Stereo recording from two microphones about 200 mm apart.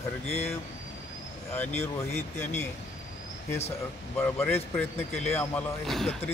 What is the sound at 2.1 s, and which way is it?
Speech, 35° left (ahead or behind).